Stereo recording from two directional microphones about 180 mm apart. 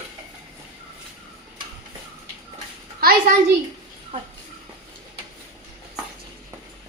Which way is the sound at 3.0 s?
55° right (ahead or behind).